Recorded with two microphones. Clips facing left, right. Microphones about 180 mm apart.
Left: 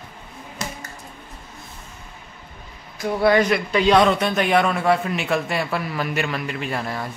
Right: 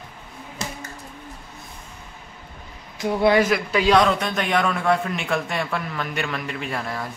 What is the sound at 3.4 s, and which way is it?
A man's voice, 5° right (ahead or behind).